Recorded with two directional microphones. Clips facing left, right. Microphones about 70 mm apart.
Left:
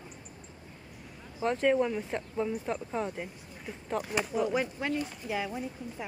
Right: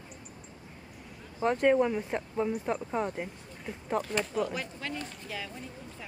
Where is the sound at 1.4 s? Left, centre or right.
Centre.